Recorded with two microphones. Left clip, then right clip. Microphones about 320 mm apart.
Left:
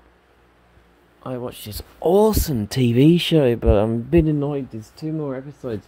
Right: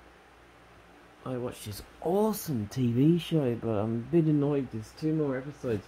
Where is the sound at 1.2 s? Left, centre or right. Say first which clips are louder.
Left 6 dB; left.